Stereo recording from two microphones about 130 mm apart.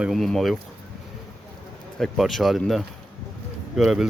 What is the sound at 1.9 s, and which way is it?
Speech, centre (ahead or behind).